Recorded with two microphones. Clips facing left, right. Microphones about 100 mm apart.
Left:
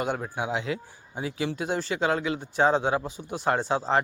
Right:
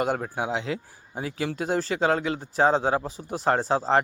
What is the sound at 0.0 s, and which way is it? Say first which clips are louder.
Speech: right 3 dB; 40° right (ahead or behind).